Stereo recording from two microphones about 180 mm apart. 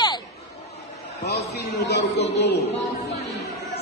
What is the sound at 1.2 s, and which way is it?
A man's voice, 65° left (ahead or behind).